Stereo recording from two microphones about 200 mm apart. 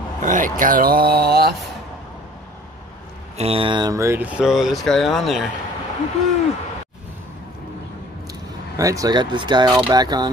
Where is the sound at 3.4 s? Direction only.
25° right (ahead or behind); by 5.4 s centre (ahead or behind).